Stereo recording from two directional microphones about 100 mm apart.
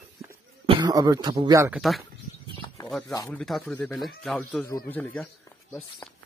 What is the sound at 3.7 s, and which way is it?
Speech, 15° left (ahead or behind).